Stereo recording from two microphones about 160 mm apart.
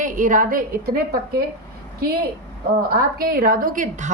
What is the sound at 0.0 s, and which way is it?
A woman's voice, 55° right (ahead or behind).